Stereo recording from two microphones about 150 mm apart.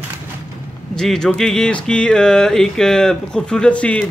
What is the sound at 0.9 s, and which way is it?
A man's voice, 5° left (ahead or behind).